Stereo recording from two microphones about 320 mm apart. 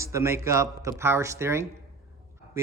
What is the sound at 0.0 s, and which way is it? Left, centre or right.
Speech, centre.